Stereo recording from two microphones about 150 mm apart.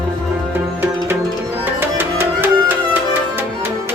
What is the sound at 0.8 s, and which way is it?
Music, 15° right (ahead or behind).